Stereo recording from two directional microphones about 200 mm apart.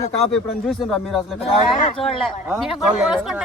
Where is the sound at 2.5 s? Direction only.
5° right (ahead or behind).